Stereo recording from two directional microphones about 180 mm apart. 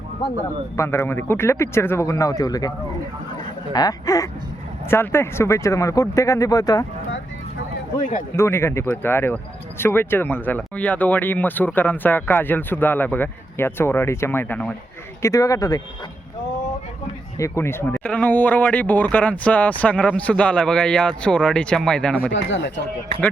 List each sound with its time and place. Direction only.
0.8 s speech: 15° left (ahead or behind)
7.9 s a man's voice: 45° left (ahead or behind)
8.4 s speech: 15° left (ahead or behind)
17.3 s speech: 15° left (ahead or behind)
22.3 s speech: 90° left